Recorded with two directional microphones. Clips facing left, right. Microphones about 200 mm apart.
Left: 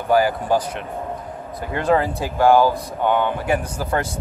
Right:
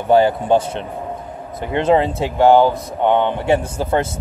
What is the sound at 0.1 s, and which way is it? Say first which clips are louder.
Speech: right 4 dB; 25° right (ahead or behind).